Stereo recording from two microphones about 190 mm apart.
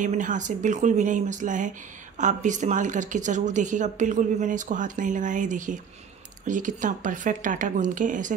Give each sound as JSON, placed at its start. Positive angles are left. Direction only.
{"t": 0.0, "sound": "speech", "side_deg": -40}